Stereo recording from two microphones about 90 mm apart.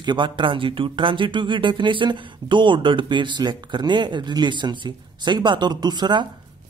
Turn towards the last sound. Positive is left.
turn(degrees=-55)  # may be behind; listen again after turning